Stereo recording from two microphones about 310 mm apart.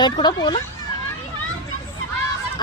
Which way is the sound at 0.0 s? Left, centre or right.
Centre.